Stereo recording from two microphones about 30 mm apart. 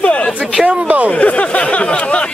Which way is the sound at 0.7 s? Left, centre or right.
Right.